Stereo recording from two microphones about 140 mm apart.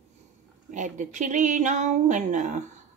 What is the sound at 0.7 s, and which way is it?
Speech, 65° right (ahead or behind).